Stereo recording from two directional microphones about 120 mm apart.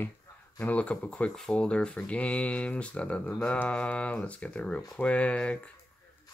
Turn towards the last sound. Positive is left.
turn(degrees=10)  # may be behind; listen again after turning